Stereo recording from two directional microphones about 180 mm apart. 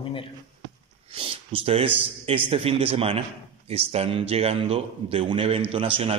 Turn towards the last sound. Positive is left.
turn(degrees=-35)  # may be behind; listen again after turning